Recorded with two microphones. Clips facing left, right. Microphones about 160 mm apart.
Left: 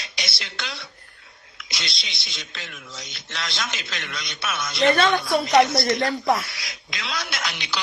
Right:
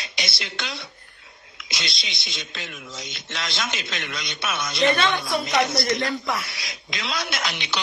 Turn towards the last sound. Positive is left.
turn(degrees=-20)  # may be behind; listen again after turning